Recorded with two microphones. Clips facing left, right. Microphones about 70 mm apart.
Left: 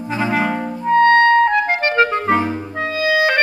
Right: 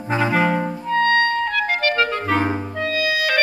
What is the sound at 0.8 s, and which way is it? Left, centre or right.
Clarinet, left.